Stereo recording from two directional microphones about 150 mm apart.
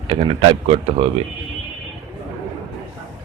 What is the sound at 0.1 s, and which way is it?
Speech, 35° right (ahead or behind).